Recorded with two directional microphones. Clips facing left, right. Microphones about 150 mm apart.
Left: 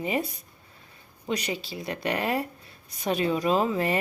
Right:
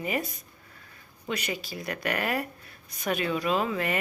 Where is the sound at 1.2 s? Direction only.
30° left (ahead or behind).